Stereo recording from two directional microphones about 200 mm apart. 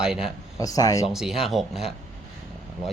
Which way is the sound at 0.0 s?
5° right (ahead or behind).